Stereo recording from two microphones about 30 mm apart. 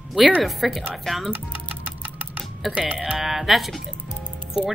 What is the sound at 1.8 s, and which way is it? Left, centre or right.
Clock, right.